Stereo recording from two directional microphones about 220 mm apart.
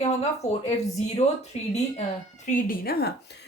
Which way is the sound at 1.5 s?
30° left (ahead or behind).